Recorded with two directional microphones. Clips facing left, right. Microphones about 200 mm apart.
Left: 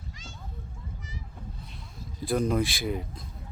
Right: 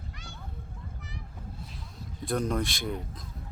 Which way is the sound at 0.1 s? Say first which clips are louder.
Even; 60° right (ahead or behind).